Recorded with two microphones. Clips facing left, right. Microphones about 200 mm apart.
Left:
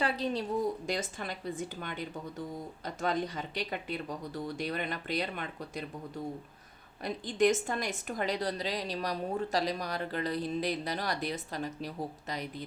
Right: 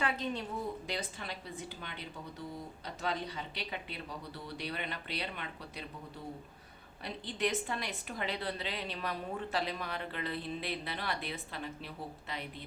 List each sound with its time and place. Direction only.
0.0 s a sound: 35° left (ahead or behind)
0.9 s speech: 45° left (ahead or behind)
7.0 s a woman's voice: 45° left (ahead or behind)